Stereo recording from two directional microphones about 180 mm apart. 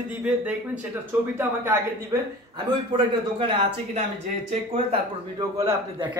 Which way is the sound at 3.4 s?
30° right (ahead or behind).